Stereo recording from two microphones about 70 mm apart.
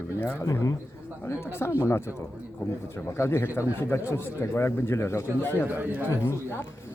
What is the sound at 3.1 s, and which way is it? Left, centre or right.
Speech, left.